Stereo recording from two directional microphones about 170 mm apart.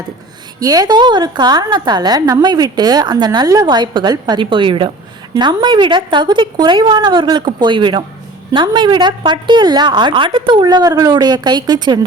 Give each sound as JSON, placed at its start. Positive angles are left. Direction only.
{"t": 0.6, "sound": "a woman's voice", "side_deg": -20}